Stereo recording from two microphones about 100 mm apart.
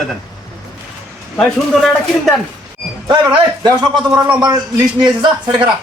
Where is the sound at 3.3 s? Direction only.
45° right (ahead or behind).